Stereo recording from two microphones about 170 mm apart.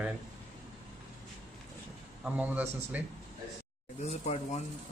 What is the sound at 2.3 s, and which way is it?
Speech, 10° right (ahead or behind).